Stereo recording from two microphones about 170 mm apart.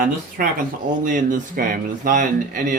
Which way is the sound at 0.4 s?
55° right (ahead or behind).